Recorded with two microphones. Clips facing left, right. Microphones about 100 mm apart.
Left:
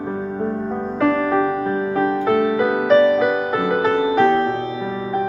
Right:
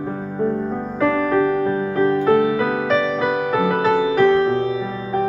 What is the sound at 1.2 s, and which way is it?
Music, 10° left (ahead or behind).